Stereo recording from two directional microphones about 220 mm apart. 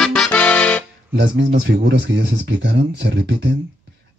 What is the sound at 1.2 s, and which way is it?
Speech, 50° right (ahead or behind).